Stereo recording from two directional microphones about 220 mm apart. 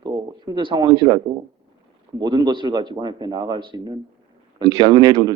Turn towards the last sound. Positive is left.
turn(degrees=-20)  # may be behind; listen again after turning